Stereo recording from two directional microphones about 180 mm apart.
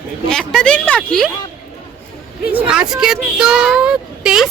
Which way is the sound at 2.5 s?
5° right (ahead or behind).